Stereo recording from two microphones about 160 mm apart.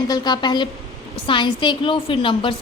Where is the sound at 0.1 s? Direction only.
25° left (ahead or behind).